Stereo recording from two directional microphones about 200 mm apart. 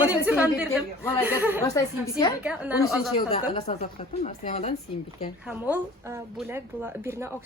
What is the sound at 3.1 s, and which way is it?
A woman's voice, 30° left (ahead or behind).